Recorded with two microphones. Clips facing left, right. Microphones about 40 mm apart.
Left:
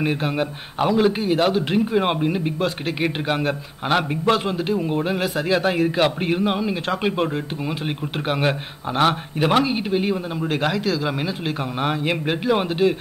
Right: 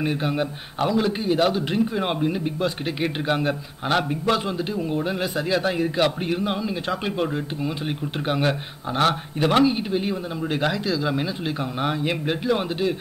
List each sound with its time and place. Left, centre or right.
0.0 s a man's voice: centre